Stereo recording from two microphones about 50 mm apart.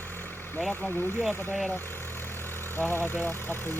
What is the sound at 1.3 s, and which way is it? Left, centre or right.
Speech, left.